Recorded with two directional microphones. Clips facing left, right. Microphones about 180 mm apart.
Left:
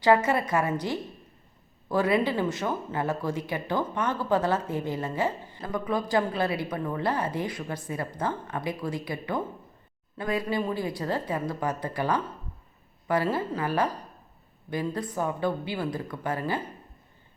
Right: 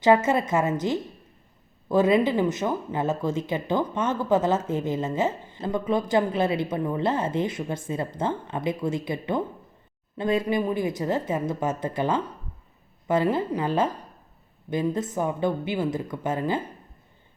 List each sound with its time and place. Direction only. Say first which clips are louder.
0.0 s speech: right 2 dB; 20° right (ahead or behind)